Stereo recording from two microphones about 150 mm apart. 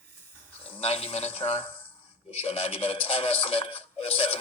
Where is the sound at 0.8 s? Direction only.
40° left (ahead or behind).